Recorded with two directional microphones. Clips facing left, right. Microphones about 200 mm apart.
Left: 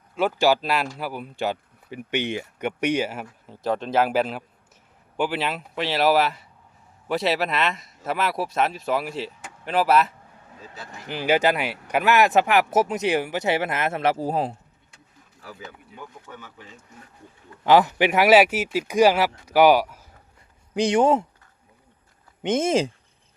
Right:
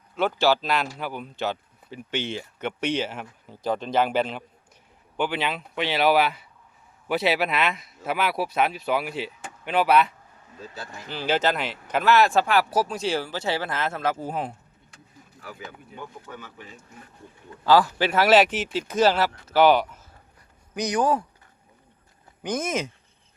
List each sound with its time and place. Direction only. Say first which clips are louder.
0.2 s speech: left 2 dB; 10° left (ahead or behind)
11.1 s speech: left 3 dB; 15° left (ahead or behind); by 14.5 s 35° left (ahead or behind)
17.6 s speech: left 2 dB; 20° left (ahead or behind)
20.7 s speech: left 5 dB; 25° left (ahead or behind)
22.4 s speech: left 6 dB; 25° left (ahead or behind)